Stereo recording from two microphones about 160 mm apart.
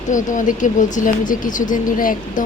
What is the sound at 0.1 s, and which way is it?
Speech, 55° left (ahead or behind).